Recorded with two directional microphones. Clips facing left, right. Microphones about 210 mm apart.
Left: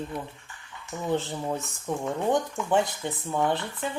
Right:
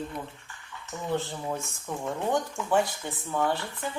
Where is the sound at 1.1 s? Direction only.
20° left (ahead or behind).